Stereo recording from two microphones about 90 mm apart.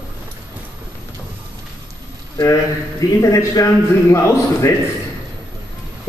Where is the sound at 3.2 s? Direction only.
40° left (ahead or behind).